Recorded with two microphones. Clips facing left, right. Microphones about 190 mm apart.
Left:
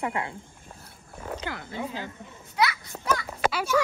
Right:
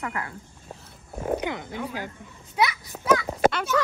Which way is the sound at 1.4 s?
15° right (ahead or behind).